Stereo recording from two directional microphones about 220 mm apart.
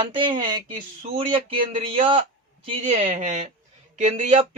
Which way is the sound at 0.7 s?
35° right (ahead or behind).